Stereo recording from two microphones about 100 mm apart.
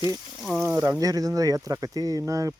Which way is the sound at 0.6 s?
25° right (ahead or behind).